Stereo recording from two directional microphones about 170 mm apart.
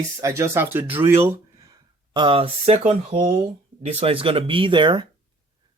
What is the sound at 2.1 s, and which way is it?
Speech, 30° right (ahead or behind).